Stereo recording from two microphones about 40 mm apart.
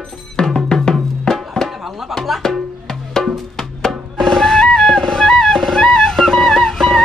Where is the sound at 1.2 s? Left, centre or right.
Centre.